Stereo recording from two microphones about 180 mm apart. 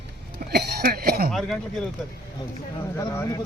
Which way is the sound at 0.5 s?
60° right (ahead or behind).